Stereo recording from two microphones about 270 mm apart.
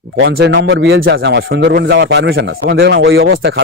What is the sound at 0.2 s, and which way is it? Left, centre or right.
A man's voice, right.